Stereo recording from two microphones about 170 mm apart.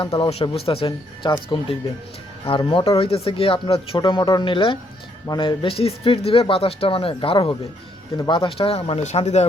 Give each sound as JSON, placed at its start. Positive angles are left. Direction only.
{"t": 0.0, "sound": "speech", "side_deg": 35}